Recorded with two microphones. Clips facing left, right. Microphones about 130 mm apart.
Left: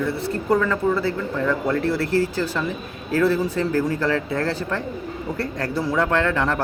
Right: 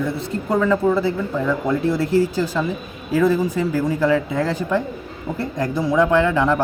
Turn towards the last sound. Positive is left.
turn(degrees=-15)  # may be behind; listen again after turning